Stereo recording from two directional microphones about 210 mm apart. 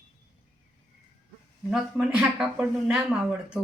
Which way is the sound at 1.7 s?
5° right (ahead or behind).